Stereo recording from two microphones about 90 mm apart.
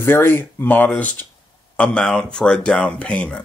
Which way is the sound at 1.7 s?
10° left (ahead or behind).